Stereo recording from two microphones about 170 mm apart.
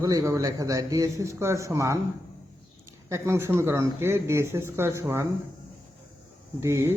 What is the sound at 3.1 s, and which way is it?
Speech, 15° right (ahead or behind).